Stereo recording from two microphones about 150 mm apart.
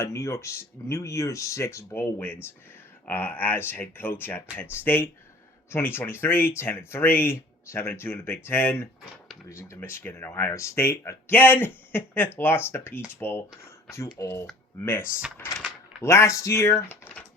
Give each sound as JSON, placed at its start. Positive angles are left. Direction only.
{"t": 0.0, "sound": "speech", "side_deg": 20}
{"t": 15.5, "sound": "mechanisms", "side_deg": -5}
{"t": 16.0, "sound": "speech", "side_deg": 20}